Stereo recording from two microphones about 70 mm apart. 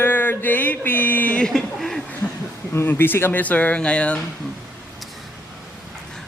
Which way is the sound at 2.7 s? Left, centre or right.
Left.